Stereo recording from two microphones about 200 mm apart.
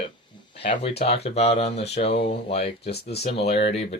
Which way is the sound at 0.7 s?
30° left (ahead or behind).